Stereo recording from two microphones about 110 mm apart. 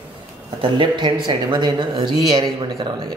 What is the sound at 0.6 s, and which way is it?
Speech, 45° right (ahead or behind).